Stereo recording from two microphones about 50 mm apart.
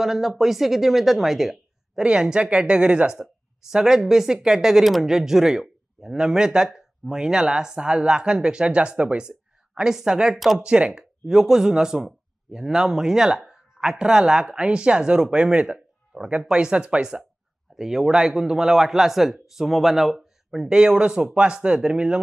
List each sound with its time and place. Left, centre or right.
0.0 s speech: centre
2.0 s speech: centre
3.2 s a woman's voice: centre
10.9 s a woman's voice: centre
17.7 s a woman's voice: centre